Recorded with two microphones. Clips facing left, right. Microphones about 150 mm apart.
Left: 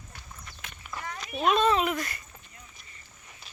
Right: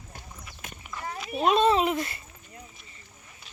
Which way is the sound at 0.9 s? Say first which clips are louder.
Left 1 dB; 20° right (ahead or behind).